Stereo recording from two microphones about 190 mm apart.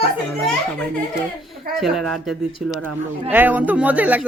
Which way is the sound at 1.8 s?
Centre (ahead or behind).